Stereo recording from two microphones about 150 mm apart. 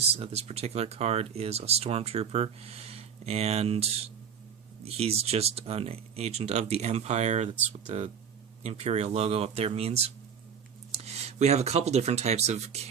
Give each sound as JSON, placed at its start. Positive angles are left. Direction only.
{"t": 0.2, "sound": "speech", "side_deg": -45}